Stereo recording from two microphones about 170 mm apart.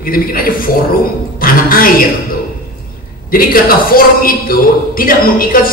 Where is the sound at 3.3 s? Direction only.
60° left (ahead or behind).